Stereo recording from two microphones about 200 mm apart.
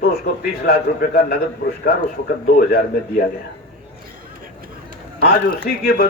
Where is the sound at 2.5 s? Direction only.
45° left (ahead or behind).